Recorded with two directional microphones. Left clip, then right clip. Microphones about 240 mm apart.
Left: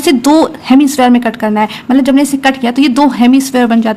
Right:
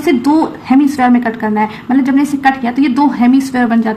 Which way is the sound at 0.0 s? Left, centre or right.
Left.